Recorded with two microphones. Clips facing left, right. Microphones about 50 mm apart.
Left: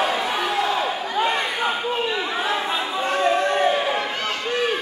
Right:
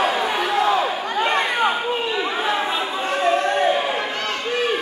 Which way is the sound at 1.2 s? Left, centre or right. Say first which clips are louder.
Right 5 dB; right.